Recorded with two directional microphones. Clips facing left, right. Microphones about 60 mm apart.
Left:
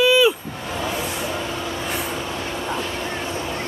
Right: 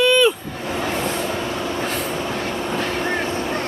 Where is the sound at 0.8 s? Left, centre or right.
Right.